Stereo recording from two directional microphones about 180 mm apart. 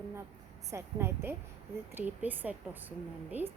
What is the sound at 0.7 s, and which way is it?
A woman's voice, 15° right (ahead or behind).